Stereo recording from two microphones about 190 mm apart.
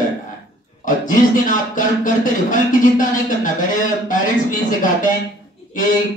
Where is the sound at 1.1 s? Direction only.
45° left (ahead or behind).